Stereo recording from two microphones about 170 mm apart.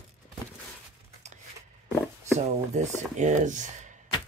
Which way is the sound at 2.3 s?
45° right (ahead or behind).